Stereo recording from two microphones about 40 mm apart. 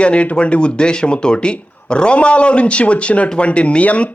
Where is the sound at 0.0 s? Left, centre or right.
Left.